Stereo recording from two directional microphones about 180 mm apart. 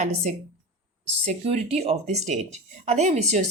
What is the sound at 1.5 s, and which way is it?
Speech, 35° right (ahead or behind).